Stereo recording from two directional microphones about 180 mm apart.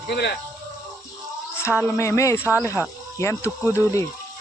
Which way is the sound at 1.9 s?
15° left (ahead or behind).